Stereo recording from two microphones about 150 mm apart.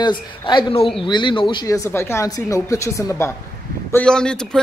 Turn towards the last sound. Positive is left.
turn(degrees=5)  # may be behind; listen again after turning